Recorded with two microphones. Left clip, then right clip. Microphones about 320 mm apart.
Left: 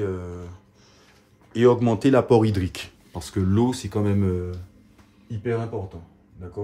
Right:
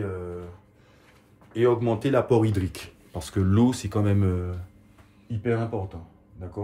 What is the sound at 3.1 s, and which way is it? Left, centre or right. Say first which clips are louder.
Speech: even; centre.